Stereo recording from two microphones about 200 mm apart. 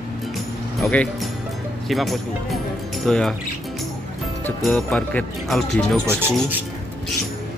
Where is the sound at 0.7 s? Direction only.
5° left (ahead or behind).